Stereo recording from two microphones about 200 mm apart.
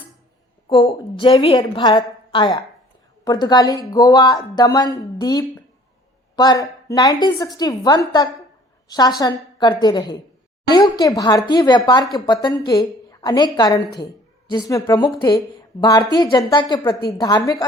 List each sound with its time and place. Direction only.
0.7 s a woman's voice: 25° left (ahead or behind)